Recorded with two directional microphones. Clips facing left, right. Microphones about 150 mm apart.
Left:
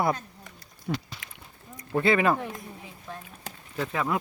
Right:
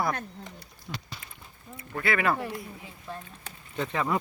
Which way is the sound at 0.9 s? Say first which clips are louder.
Left 9 dB; 55° left (ahead or behind).